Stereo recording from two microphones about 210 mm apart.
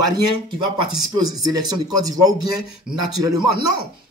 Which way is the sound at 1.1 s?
15° right (ahead or behind).